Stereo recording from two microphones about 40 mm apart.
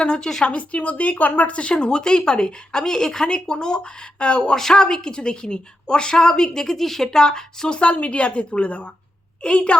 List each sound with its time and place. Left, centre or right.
0.2 s a woman's voice: centre
0.4 s a woman's voice: left; by 7.8 s centre
7.8 s a woman's voice: left